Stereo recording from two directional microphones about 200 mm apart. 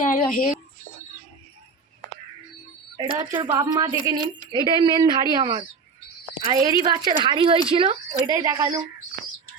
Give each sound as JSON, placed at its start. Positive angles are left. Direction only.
{"t": 0.0, "sound": "speech", "side_deg": 40}
{"t": 3.0, "sound": "a woman's voice", "side_deg": -20}